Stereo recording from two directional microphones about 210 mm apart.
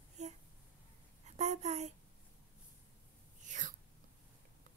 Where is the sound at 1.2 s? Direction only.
30° right (ahead or behind).